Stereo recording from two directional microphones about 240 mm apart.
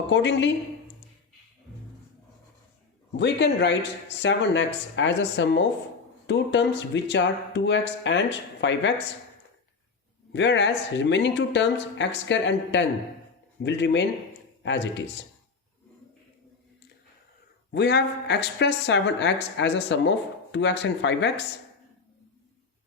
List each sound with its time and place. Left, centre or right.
0.1 s speech: left
3.2 s speech: left
10.3 s speech: left
17.7 s speech: left